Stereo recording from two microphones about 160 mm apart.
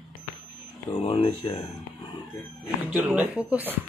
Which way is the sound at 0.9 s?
35° left (ahead or behind).